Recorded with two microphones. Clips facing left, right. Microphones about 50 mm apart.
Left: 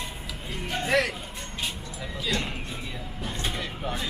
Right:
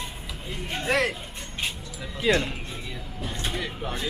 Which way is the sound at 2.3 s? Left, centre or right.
Right.